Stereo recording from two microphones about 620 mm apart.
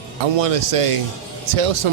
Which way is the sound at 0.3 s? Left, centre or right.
Right.